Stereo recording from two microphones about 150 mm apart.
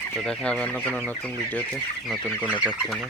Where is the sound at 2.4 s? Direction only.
10° right (ahead or behind).